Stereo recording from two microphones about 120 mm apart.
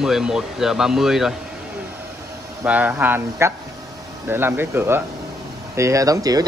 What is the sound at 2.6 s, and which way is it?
Speech, 15° right (ahead or behind).